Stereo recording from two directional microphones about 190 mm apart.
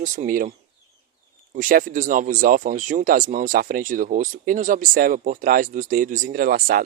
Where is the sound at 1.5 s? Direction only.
45° right (ahead or behind).